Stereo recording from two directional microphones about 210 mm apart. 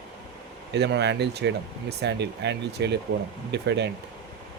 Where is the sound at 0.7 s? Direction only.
55° right (ahead or behind).